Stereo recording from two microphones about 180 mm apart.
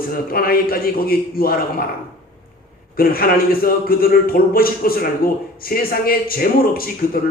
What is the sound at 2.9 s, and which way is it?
A man's voice, 55° left (ahead or behind).